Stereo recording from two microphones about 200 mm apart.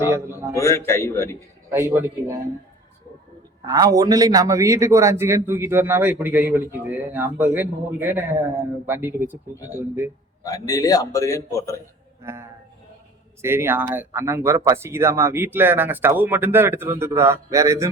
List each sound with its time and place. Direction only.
0.5 s a man's voice: 15° left (ahead or behind)
1.7 s a man's voice: 10° right (ahead or behind)
3.7 s a man's voice: 20° right (ahead or behind)
10.4 s a man's voice: 15° left (ahead or behind)
12.2 s a man's voice: 15° right (ahead or behind)